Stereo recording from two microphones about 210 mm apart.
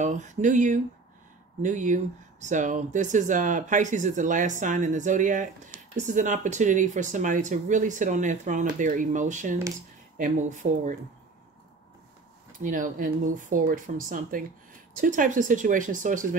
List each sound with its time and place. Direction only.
0.0 s speech: 35° right (ahead or behind)
12.5 s speech: 40° right (ahead or behind)